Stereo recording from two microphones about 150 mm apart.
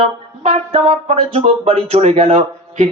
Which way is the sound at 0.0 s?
40° right (ahead or behind).